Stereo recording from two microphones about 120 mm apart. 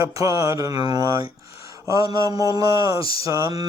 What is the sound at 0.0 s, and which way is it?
Mantra, 30° right (ahead or behind).